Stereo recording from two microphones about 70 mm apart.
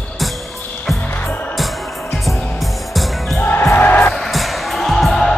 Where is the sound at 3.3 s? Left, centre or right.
Left.